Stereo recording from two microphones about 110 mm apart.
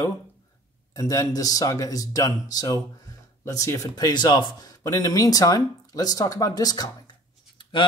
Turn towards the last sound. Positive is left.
turn(degrees=50)  # may be behind; listen again after turning